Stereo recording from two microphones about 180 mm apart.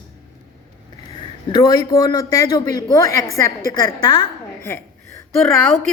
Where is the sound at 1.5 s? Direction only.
25° left (ahead or behind).